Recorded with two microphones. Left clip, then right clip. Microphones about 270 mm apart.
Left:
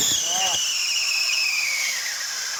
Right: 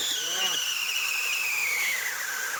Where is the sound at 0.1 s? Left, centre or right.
Centre.